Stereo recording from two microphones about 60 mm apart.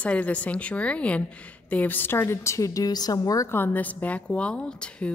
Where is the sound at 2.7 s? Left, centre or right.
Left.